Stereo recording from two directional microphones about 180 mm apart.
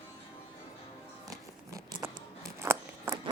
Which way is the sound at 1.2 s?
20° right (ahead or behind).